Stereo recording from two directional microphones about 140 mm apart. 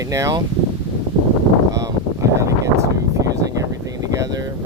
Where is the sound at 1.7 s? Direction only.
25° right (ahead or behind).